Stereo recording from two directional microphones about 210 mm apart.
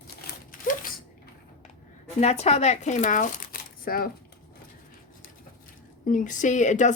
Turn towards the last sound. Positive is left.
turn(degrees=35)  # may be behind; listen again after turning